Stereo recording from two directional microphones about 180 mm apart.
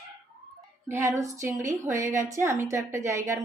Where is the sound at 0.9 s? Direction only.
15° right (ahead or behind).